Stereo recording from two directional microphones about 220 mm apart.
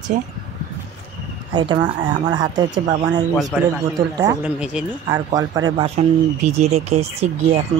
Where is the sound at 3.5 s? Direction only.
Centre (ahead or behind).